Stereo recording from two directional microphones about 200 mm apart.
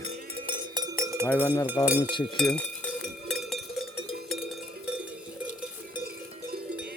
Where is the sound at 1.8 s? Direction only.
10° right (ahead or behind).